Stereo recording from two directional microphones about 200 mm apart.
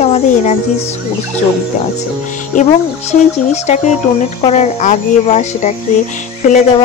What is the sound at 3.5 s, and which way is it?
Speech, 35° left (ahead or behind).